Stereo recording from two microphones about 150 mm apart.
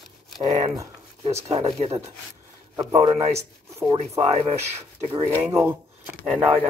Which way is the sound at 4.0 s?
40° right (ahead or behind).